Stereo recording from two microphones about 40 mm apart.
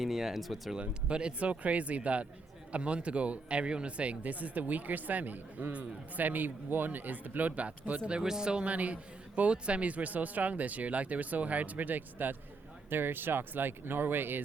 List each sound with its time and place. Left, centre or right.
0.0 s speech: centre
0.8 s a man's voice: right
8.2 s speech: centre
8.6 s a man's voice: right
12.9 s speech: right